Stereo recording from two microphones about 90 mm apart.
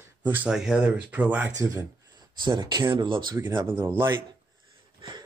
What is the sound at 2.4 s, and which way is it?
Speech, 55° right (ahead or behind).